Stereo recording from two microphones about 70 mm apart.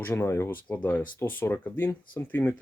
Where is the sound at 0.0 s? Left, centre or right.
Left.